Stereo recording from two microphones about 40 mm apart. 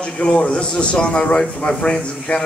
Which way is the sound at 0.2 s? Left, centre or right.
Left.